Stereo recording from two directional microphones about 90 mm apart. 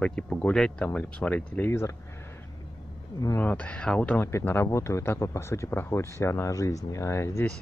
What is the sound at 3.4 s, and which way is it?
Speech, 15° left (ahead or behind).